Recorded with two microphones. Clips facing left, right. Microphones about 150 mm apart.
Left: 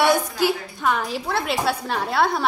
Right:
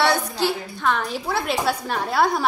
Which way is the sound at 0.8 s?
5° left (ahead or behind).